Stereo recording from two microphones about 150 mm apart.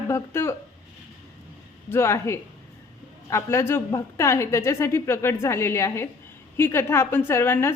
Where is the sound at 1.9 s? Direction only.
15° left (ahead or behind).